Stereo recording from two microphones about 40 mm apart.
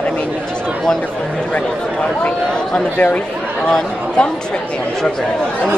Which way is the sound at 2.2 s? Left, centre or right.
Left.